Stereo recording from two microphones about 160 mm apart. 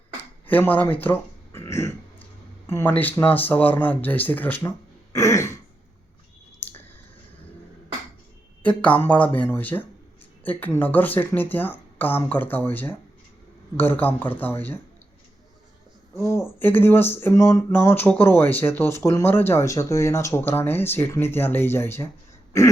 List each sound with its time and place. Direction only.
0.4 s speech: 10° left (ahead or behind)
6.6 s clicking: 15° left (ahead or behind)
8.6 s speech: 10° left (ahead or behind)
16.1 s speech: 15° left (ahead or behind)